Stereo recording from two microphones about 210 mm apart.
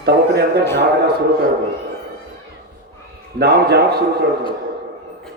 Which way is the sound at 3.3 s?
50° right (ahead or behind).